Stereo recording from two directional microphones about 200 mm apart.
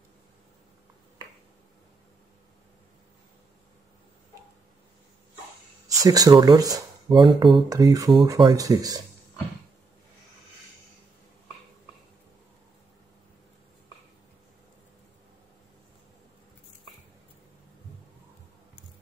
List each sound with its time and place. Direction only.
5.9 s speech: 20° right (ahead or behind)